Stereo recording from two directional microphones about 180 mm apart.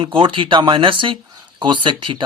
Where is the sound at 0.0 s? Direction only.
30° right (ahead or behind).